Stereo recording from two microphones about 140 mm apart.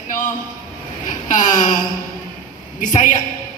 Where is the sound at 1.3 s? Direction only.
65° left (ahead or behind).